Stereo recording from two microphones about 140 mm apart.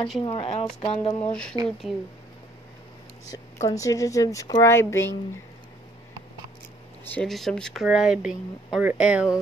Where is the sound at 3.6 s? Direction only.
25° left (ahead or behind).